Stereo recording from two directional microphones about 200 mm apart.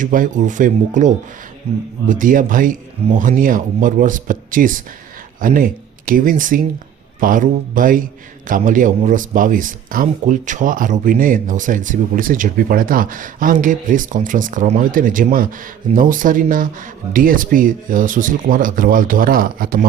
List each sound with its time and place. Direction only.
0.0 s speech: 40° right (ahead or behind)